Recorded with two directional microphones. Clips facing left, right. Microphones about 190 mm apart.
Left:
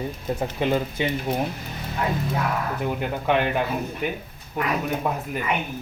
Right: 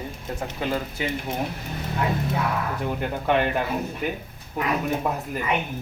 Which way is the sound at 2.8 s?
5° left (ahead or behind).